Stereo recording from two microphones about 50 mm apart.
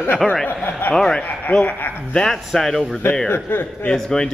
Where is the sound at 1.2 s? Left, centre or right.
Left.